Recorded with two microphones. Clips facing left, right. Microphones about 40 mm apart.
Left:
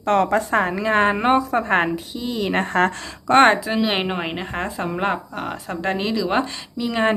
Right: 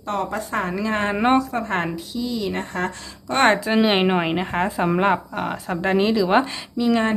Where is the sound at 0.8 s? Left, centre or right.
Left.